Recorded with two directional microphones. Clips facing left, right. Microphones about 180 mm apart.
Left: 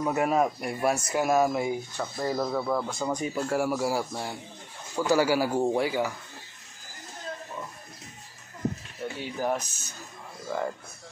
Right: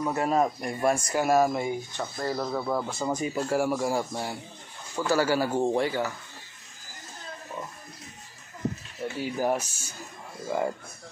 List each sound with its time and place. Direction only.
0.1 s speech: 10° left (ahead or behind)
2.5 s speech: 5° right (ahead or behind)
4.9 s speech: 15° left (ahead or behind)
9.0 s speech: 5° right (ahead or behind)